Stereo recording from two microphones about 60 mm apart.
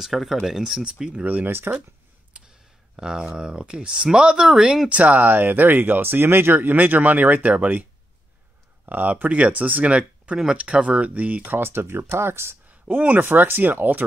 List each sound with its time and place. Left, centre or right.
0.0 s speech: centre
1.2 s speech: right
3.0 s speech: centre
4.8 s speech: right
8.8 s speech: right
10.3 s speech: centre
10.6 s speech: right
12.6 s speech: right